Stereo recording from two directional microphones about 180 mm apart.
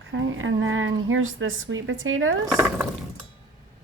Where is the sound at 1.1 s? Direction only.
90° right.